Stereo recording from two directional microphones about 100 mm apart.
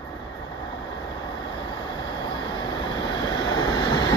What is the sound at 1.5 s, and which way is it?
Vehicle, 50° left (ahead or behind).